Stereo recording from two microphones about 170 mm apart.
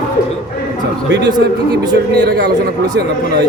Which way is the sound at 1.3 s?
25° right (ahead or behind).